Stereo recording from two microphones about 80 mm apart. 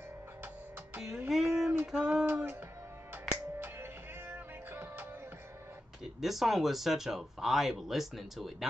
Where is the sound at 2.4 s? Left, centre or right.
Right.